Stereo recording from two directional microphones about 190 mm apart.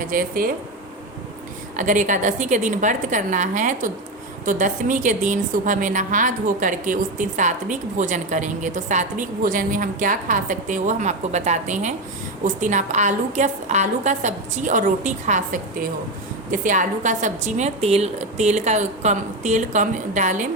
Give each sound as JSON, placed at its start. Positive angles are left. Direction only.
{"t": 0.0, "sound": "speech", "side_deg": -45}
{"t": 1.7, "sound": "a woman's voice", "side_deg": -40}